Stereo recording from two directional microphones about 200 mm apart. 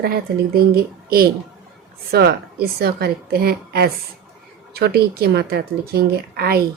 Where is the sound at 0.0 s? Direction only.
50° right (ahead or behind).